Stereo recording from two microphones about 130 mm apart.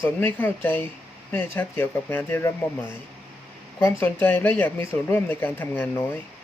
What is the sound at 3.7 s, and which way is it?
Speech, 15° left (ahead or behind).